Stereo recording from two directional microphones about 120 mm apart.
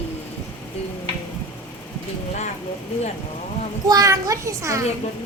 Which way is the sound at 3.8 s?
30° right (ahead or behind).